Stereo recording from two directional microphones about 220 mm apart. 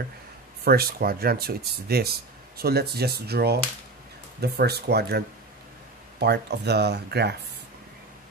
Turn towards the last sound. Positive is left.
turn(degrees=-50)  # may be behind; listen again after turning